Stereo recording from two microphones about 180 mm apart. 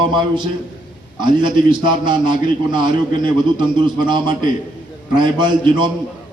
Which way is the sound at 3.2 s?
25° right (ahead or behind).